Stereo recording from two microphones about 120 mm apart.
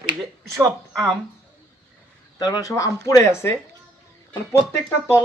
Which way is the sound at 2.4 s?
30° left (ahead or behind).